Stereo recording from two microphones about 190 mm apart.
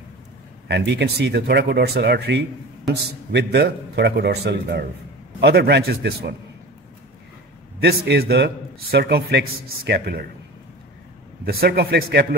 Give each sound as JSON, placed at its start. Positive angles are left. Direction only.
{"t": 0.7, "sound": "a man's voice", "side_deg": -65}
{"t": 7.8, "sound": "a man's voice", "side_deg": -55}
{"t": 11.4, "sound": "a man's voice", "side_deg": -55}